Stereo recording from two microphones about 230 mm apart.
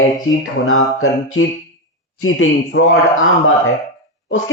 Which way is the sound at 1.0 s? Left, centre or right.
Left.